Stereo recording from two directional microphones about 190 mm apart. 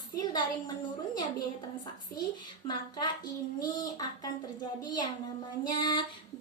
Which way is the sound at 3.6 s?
20° left (ahead or behind).